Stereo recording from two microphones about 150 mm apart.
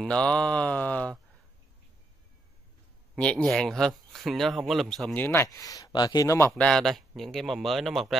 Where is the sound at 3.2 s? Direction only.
5° left (ahead or behind).